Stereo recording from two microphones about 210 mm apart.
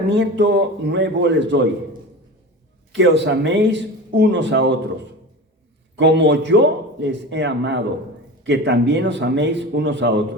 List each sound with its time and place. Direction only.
0.1 s a man's voice: 55° right (ahead or behind)
2.9 s a man's voice: 55° right (ahead or behind)
6.0 s a man's voice: 55° right (ahead or behind)